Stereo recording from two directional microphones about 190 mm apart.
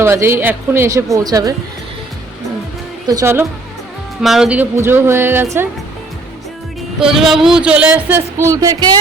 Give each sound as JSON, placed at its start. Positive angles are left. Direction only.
{"t": 0.0, "sound": "a woman's voice", "side_deg": -15}
{"t": 3.1, "sound": "speech", "side_deg": -15}
{"t": 4.2, "sound": "speech", "side_deg": 0}
{"t": 7.1, "sound": "speech", "side_deg": 0}